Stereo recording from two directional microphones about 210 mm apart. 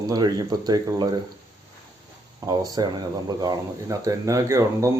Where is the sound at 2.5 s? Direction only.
20° right (ahead or behind).